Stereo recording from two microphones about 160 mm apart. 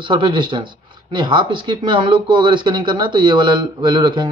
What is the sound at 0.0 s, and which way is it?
A man's voice, 30° right (ahead or behind).